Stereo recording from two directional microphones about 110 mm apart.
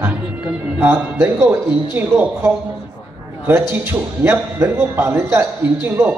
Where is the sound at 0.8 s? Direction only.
15° right (ahead or behind).